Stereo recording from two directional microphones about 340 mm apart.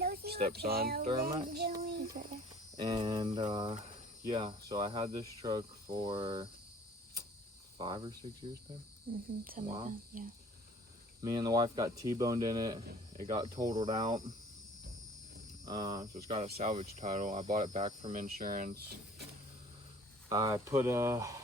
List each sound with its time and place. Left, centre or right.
0.0 s a child's voice: right
7.8 s speech: centre
9.4 s speech: right
11.2 s speech: centre
12.8 s speech: right
13.2 s speech: centre
15.6 s speech: centre
20.3 s speech: centre